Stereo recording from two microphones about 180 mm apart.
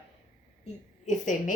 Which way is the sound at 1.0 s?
45° left (ahead or behind).